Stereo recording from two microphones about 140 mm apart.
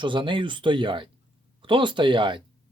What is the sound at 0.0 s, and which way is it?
Speech, 35° right (ahead or behind).